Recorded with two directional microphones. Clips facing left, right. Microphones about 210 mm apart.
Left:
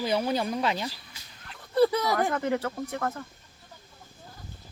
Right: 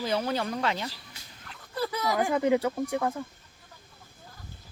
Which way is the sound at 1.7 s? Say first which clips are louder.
Left 10 dB; 30° left (ahead or behind).